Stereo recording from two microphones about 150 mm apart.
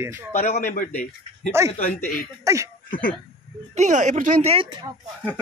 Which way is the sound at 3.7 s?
50° right (ahead or behind).